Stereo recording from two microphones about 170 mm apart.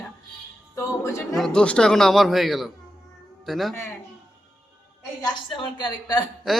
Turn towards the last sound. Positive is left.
turn(degrees=25)  # may be behind; listen again after turning